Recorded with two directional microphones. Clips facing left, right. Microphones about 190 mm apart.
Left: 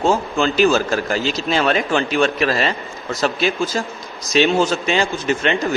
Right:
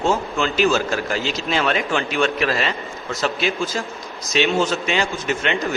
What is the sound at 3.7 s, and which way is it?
Speech, 40° left (ahead or behind).